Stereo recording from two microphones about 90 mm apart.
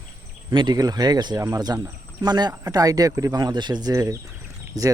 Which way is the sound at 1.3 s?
40° right (ahead or behind).